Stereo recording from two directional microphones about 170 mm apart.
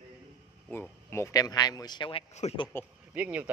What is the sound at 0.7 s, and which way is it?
Speech, 15° left (ahead or behind).